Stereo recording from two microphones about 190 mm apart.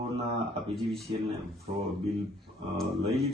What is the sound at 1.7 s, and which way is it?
Speech, 35° right (ahead or behind).